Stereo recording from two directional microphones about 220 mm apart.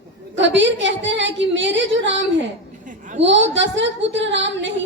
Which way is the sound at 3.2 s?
55° right (ahead or behind).